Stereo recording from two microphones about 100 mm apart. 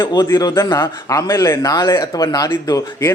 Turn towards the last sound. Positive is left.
turn(degrees=35)  # may be behind; listen again after turning